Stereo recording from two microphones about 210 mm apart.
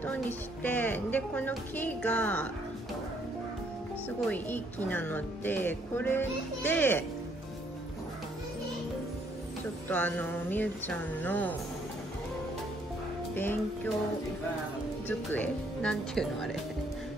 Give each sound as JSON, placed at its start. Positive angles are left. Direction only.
{"t": 0.0, "sound": "speech", "side_deg": 5}
{"t": 4.3, "sound": "speech", "side_deg": 10}
{"t": 9.8, "sound": "speech", "side_deg": 10}
{"t": 13.3, "sound": "speech", "side_deg": 10}
{"t": 15.0, "sound": "speech", "side_deg": 5}